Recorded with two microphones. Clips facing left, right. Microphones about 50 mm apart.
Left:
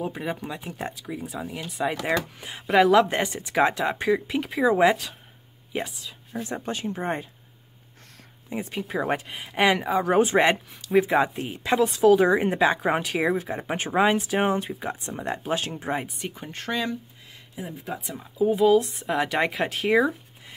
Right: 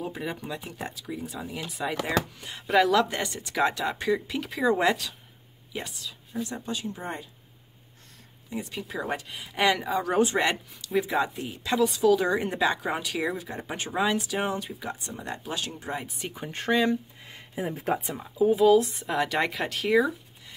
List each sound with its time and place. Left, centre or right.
0.0 s speech: centre
6.4 s speech: left
8.5 s speech: left
9.5 s speech: centre
10.0 s speech: left
16.1 s speech: centre
16.5 s speech: centre
17.6 s speech: right
18.0 s speech: centre
20.0 s a sound: left